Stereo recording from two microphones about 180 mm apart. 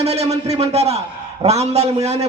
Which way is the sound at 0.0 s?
35° right (ahead or behind).